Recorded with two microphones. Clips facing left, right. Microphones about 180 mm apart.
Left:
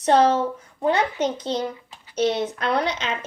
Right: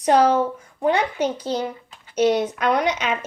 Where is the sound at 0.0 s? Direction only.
10° right (ahead or behind).